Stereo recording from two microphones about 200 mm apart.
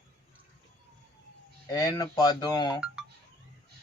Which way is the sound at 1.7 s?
20° left (ahead or behind).